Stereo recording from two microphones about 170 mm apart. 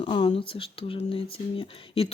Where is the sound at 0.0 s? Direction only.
30° left (ahead or behind).